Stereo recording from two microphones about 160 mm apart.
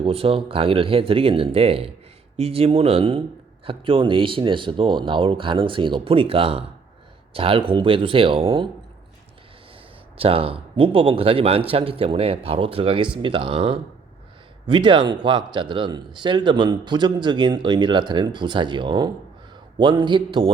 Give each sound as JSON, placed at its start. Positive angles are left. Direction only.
{"t": 0.0, "sound": "a man's voice", "side_deg": -35}
{"t": 10.2, "sound": "a man's voice", "side_deg": -35}